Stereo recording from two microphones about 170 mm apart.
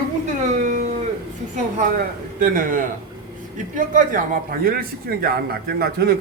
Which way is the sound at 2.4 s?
50° right (ahead or behind).